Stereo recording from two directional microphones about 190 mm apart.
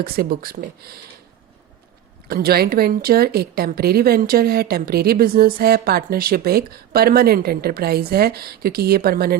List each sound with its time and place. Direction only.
0.0 s speech: 55° right (ahead or behind)
2.2 s speech: 55° right (ahead or behind)